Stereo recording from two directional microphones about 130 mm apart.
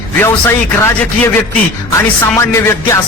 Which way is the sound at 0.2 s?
15° left (ahead or behind).